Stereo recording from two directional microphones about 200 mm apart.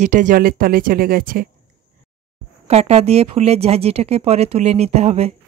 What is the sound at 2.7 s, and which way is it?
Speech, 30° right (ahead or behind).